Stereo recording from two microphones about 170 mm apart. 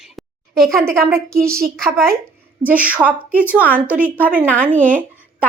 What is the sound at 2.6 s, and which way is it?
Speech, 10° right (ahead or behind).